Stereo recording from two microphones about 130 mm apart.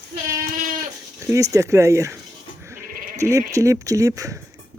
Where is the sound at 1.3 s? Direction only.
25° right (ahead or behind).